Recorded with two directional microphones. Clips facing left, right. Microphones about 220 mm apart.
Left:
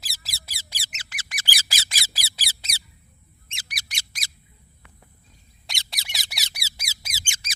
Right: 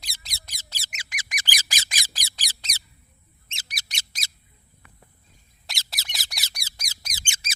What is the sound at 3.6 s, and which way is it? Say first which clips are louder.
Bird: left 1 dB; 25° right (ahead or behind).